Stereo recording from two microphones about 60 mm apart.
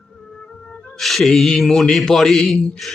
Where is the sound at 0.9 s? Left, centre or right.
Centre.